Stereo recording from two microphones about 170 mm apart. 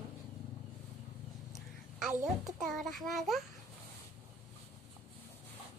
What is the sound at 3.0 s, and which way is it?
Speech, centre (ahead or behind).